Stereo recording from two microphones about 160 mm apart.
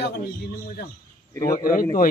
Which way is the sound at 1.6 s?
60° left (ahead or behind).